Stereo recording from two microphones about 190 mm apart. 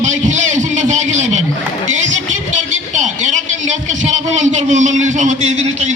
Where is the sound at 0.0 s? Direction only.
40° right (ahead or behind).